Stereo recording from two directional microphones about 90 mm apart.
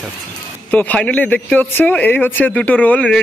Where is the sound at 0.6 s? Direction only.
15° left (ahead or behind).